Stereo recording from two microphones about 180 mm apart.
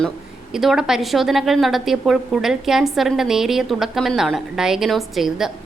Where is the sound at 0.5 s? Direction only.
5° right (ahead or behind).